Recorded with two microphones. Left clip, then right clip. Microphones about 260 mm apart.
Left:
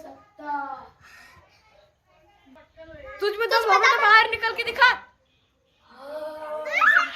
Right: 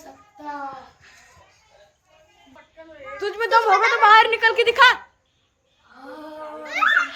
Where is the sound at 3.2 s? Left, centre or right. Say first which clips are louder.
Right 4 dB; centre.